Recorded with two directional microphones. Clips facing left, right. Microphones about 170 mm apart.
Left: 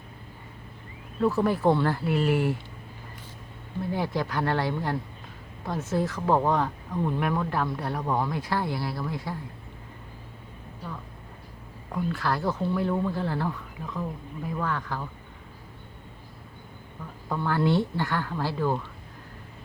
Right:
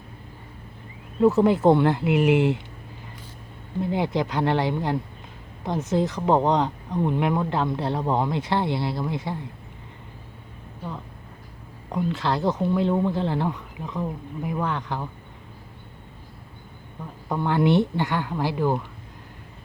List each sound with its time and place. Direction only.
1.2 s speech: 20° right (ahead or behind)
3.8 s speech: 20° right (ahead or behind)
11.9 s speech: 20° right (ahead or behind)
17.2 s speech: 20° right (ahead or behind)